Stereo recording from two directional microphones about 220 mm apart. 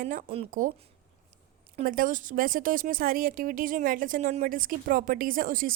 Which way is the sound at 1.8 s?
40° right (ahead or behind).